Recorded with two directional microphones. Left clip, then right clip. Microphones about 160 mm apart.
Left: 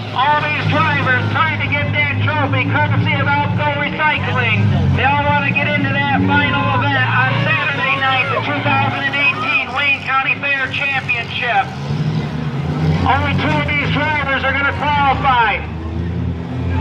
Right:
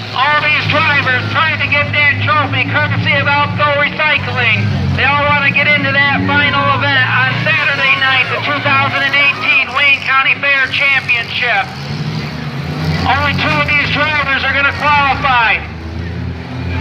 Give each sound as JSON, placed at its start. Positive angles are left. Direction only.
{"t": 0.2, "sound": "vehicle", "side_deg": -10}
{"t": 13.1, "sound": "vehicle", "side_deg": -30}